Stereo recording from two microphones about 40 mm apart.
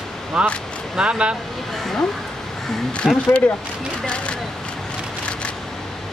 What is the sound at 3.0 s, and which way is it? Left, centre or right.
Speech, centre.